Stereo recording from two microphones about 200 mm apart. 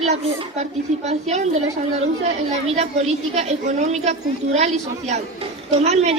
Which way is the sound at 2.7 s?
35° right (ahead or behind).